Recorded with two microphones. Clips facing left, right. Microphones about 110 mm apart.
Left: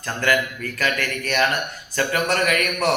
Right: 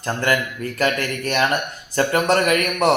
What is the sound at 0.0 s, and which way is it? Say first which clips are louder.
A man's voice: right 1 dB; 30° right (ahead or behind).